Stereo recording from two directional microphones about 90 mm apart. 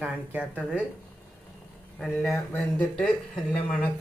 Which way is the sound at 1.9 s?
Centre (ahead or behind).